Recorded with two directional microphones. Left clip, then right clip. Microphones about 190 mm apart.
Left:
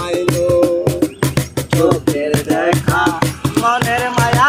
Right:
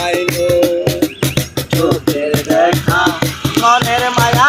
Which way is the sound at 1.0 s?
Centre (ahead or behind).